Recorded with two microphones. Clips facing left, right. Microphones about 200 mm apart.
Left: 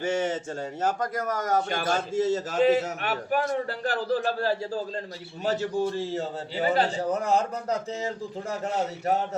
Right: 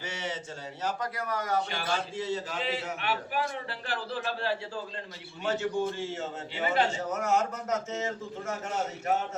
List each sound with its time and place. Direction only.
0.0 s a man's voice: 50° left (ahead or behind)